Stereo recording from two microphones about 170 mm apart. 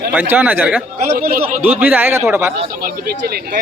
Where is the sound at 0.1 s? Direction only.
10° right (ahead or behind).